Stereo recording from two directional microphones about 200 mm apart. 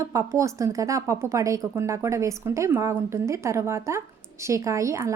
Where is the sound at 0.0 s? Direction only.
15° right (ahead or behind).